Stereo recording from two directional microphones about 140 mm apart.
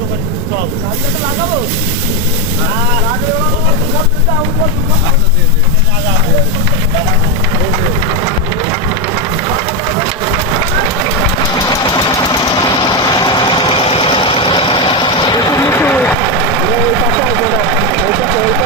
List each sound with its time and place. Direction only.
11.7 s vehicle: 25° left (ahead or behind)